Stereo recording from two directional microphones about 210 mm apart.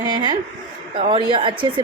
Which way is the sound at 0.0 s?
20° right (ahead or behind).